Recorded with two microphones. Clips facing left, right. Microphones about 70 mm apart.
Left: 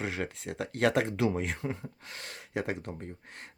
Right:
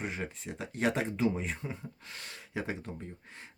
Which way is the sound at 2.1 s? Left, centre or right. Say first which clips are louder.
Left 4 dB; left.